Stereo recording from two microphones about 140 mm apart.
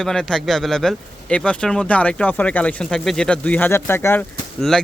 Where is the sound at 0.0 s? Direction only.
5° left (ahead or behind).